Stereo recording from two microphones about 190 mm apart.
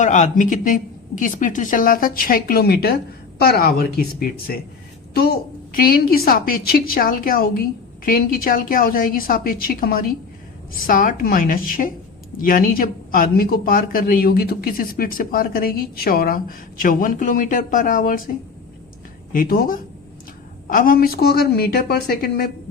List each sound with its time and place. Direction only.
0.0 s speech: 40° left (ahead or behind)
19.3 s speech: 50° left (ahead or behind)